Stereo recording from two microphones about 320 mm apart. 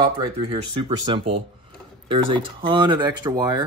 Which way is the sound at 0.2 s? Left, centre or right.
Centre.